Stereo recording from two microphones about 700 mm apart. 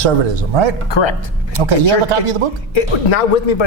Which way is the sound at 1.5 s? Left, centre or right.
Right.